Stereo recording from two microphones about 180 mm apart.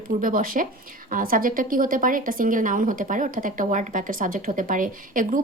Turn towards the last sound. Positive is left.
turn(degrees=-50)  # may be behind; listen again after turning